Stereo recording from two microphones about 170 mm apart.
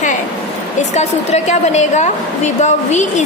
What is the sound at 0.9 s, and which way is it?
A woman's voice, 40° left (ahead or behind).